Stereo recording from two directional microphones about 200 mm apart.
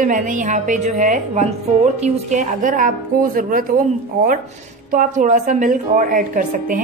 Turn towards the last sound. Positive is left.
turn(degrees=-45)  # may be behind; listen again after turning